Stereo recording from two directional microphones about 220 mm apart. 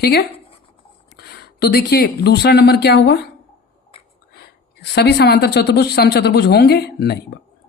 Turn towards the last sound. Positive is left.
turn(degrees=50)  # may be behind; listen again after turning